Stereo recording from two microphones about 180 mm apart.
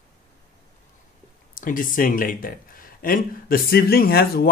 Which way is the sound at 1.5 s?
50° left (ahead or behind).